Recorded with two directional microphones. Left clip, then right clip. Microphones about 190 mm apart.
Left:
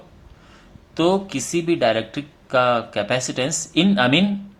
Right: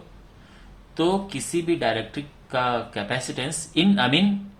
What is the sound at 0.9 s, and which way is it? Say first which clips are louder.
Speech: left 4 dB; 30° left (ahead or behind).